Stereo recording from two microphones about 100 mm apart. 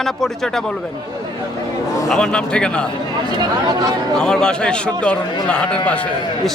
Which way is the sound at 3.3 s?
40° right (ahead or behind).